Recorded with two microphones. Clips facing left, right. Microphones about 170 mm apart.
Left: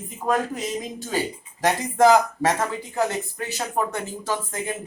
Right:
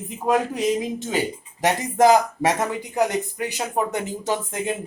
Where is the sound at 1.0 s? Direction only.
20° right (ahead or behind).